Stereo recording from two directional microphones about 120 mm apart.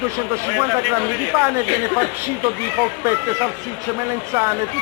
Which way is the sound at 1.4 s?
25° right (ahead or behind).